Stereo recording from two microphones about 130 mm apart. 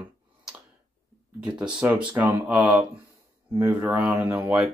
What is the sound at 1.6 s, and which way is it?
Speech, 5° right (ahead or behind).